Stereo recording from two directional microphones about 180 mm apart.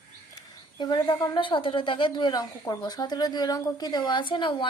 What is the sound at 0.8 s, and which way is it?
A woman's voice, 25° left (ahead or behind).